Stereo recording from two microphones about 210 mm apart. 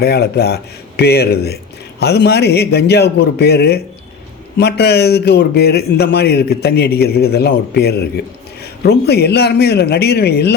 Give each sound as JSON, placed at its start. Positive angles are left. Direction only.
{"t": 0.0, "sound": "speech", "side_deg": 50}